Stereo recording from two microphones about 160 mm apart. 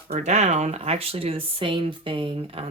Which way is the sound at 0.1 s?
45° right (ahead or behind).